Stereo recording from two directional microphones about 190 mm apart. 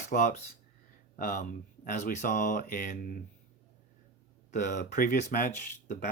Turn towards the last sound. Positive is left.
turn(degrees=45)  # may be behind; listen again after turning